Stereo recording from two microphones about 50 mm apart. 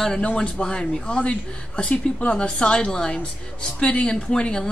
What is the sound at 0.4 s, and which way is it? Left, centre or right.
A woman's voice, centre.